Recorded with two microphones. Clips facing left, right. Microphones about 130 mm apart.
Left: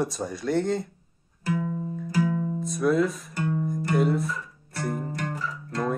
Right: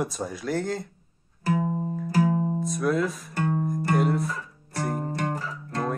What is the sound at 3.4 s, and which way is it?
Music, 60° right (ahead or behind).